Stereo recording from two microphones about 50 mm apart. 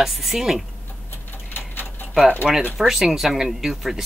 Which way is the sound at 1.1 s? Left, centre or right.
Left.